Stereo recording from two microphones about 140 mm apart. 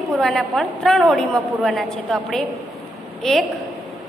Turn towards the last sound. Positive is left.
turn(degrees=5)  # may be behind; listen again after turning